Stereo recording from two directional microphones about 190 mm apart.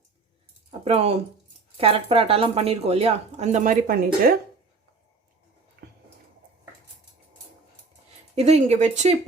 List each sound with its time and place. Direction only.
0.7 s speech: 35° right (ahead or behind); by 4.4 s 55° right (ahead or behind)
8.4 s speech: 35° right (ahead or behind)